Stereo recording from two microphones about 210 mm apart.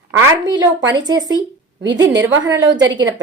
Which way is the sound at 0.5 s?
20° right (ahead or behind).